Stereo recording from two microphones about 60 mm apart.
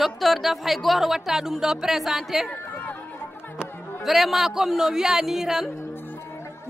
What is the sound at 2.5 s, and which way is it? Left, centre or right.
Chatter, left.